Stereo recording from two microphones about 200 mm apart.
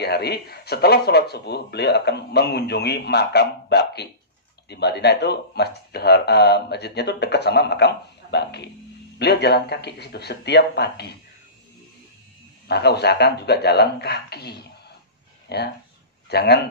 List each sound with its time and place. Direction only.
0.0 s speech: 55° left (ahead or behind)
12.6 s speech: 55° left (ahead or behind)
15.5 s a man's voice: 55° left (ahead or behind)